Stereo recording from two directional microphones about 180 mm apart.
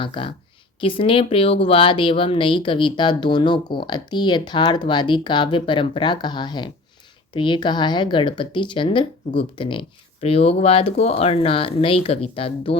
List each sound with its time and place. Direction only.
0.0 s speech: 30° left (ahead or behind)